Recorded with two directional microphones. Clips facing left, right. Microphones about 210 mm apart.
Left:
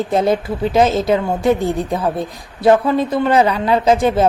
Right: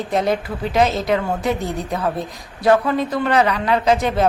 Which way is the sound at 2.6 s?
25° left (ahead or behind).